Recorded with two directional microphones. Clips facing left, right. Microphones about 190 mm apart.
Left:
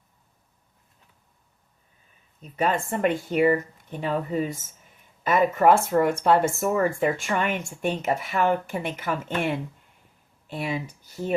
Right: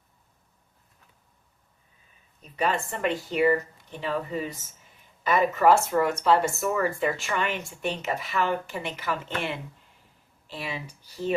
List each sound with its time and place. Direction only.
2.6 s speech: 50° left (ahead or behind)